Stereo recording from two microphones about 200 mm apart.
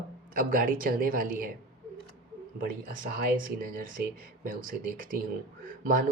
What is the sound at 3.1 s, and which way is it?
Speech, 45° right (ahead or behind).